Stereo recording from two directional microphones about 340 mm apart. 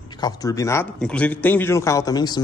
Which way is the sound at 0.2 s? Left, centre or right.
Centre.